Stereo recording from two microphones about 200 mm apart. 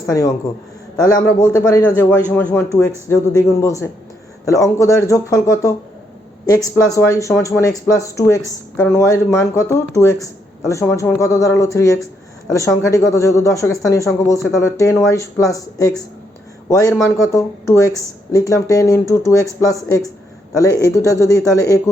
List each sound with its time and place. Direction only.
0.1 s a man's voice: 15° left (ahead or behind)
20.6 s speech: 15° left (ahead or behind)